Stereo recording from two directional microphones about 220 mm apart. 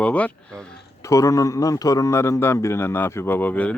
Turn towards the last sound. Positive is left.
turn(degrees=5)  # may be behind; listen again after turning